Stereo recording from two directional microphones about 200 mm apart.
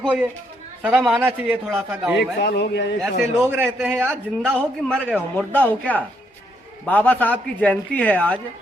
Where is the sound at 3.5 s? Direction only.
10° right (ahead or behind).